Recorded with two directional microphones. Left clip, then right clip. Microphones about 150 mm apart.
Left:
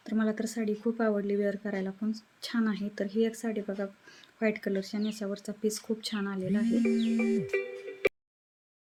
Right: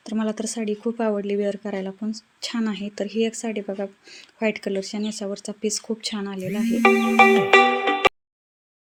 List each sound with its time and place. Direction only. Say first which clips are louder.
0.0 s speech: right 5 dB; 10° right (ahead or behind)
6.8 s music: right 15 dB; 90° right